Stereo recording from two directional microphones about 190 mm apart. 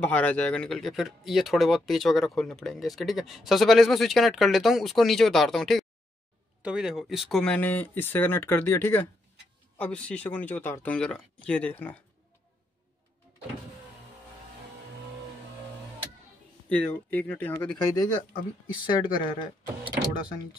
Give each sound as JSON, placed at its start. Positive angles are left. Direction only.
{"t": 0.0, "sound": "speech", "side_deg": 5}
{"t": 16.6, "sound": "speech", "side_deg": 5}